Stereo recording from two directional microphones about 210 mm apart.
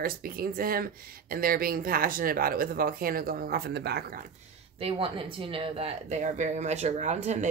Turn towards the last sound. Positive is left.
turn(degrees=-35)  # may be behind; listen again after turning